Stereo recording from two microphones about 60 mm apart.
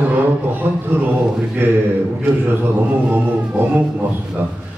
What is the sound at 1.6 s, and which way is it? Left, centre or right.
Speech, right.